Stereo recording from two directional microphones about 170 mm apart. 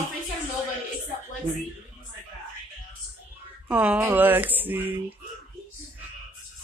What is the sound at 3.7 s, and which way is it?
Speech, 10° right (ahead or behind).